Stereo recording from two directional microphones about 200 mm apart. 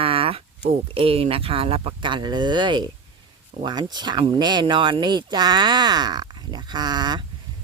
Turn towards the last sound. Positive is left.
turn(degrees=-20)  # may be behind; listen again after turning